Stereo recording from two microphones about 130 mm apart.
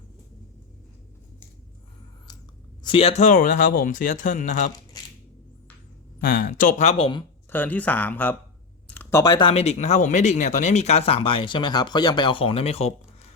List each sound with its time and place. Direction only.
2.8 s speech: 45° left (ahead or behind)
3.2 s speech: 90° left; by 4.7 s 75° left (ahead or behind)
6.2 s speech: 90° left; by 7.1 s 55° left (ahead or behind)
7.5 s speech: 15° left (ahead or behind)
8.9 s a sound: 15° left (ahead or behind)
9.2 s speech: 30° left (ahead or behind)
9.5 s speech: 55° left (ahead or behind)